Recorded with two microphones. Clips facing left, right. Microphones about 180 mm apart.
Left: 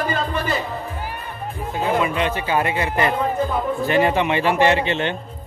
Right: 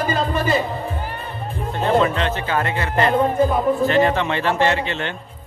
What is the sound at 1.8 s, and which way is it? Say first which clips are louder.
Music: right 2 dB; 10° left (ahead or behind).